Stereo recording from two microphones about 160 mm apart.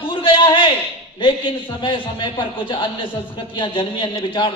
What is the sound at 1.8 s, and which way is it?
A man's voice, 30° left (ahead or behind).